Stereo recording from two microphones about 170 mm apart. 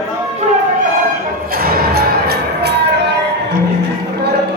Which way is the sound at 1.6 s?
60° right (ahead or behind).